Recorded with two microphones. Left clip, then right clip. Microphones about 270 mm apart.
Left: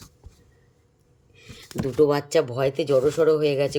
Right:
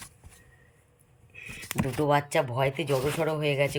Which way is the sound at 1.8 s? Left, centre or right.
Centre.